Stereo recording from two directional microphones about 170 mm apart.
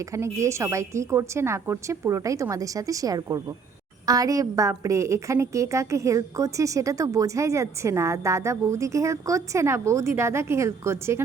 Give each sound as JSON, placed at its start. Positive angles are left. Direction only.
{"t": 0.0, "sound": "a woman's voice", "side_deg": -15}